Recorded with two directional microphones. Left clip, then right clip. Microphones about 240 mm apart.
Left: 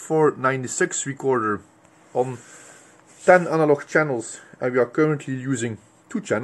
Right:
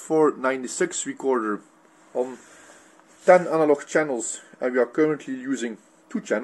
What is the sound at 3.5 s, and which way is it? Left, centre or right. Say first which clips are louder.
Speech: left 1 dB; centre.